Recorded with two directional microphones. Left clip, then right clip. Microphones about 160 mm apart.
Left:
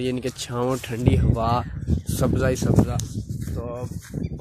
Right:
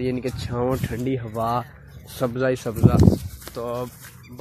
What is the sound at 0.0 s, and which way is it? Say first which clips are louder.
Speech: even; 25° left (ahead or behind).